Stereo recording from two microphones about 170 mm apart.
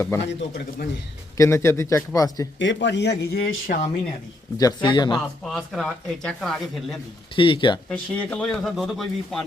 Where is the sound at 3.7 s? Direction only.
60° left (ahead or behind).